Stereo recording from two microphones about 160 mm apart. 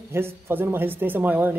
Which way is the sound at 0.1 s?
15° right (ahead or behind).